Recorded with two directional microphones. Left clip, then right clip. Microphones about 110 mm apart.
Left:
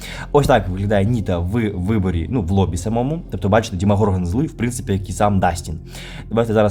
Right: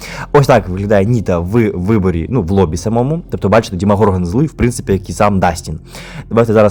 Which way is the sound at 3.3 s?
50° right (ahead or behind).